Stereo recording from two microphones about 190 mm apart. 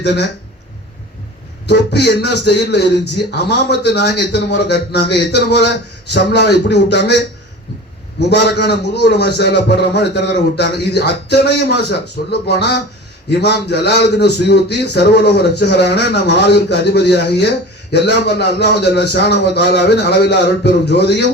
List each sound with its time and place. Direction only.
0.0 s a man's voice: 60° left (ahead or behind)
1.6 s a man's voice: 60° left (ahead or behind)
8.3 s a man's voice: 60° left (ahead or behind)